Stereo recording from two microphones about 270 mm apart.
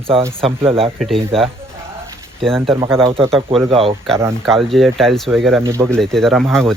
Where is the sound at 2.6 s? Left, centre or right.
Centre.